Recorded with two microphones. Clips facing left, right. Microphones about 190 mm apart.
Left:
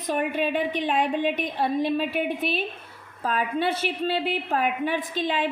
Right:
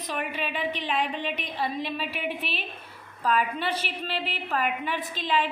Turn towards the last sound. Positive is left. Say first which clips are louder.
# left 2 dB
turn(degrees=50)  # may be behind; listen again after turning